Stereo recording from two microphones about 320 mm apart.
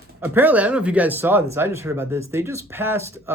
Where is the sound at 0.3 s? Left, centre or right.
Centre.